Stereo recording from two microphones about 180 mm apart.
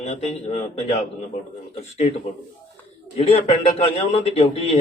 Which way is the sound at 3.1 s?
35° left (ahead or behind).